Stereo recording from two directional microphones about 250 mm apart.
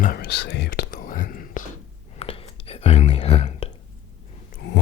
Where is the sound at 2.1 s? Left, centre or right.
Left.